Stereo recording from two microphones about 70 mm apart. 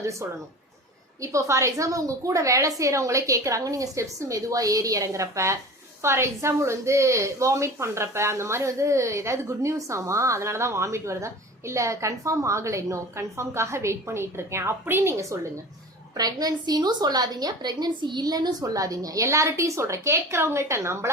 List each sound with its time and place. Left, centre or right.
0.0 s a woman's voice: right
16.1 s a woman's voice: right